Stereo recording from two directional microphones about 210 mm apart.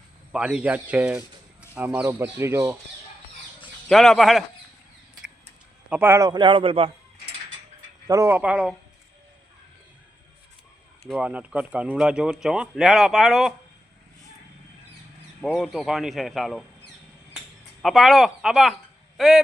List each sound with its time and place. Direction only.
0.3 s speech: 5° right (ahead or behind)
3.8 s speech: centre (ahead or behind)
5.9 s a man's voice: 10° right (ahead or behind); by 6.9 s 25° right (ahead or behind)
8.0 s speech: 15° right (ahead or behind)
11.0 s speech: centre (ahead or behind)
15.4 s speech: centre (ahead or behind)
17.8 s speech: centre (ahead or behind)